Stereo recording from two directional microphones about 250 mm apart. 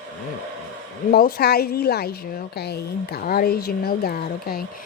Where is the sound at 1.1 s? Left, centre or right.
Left.